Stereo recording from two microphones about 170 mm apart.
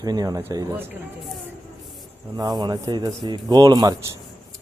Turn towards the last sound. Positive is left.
turn(degrees=-20)  # may be behind; listen again after turning